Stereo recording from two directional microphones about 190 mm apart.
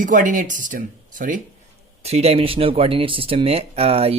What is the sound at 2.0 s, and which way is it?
Speech, 35° right (ahead or behind).